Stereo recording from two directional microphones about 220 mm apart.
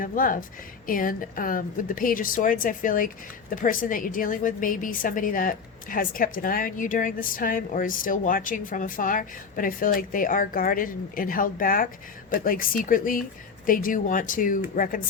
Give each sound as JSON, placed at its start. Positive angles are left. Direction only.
{"t": 0.0, "sound": "a woman's voice", "side_deg": 40}